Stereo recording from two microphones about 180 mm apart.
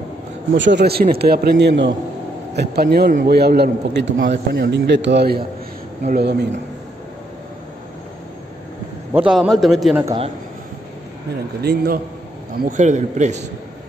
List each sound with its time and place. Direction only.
0.6 s a man's voice: 75° right (ahead or behind)
2.5 s a man's voice: 65° right (ahead or behind)
9.1 s a man's voice: 5° right (ahead or behind)
11.6 s a man's voice: 60° right (ahead or behind)
12.6 s a man's voice: 45° right (ahead or behind)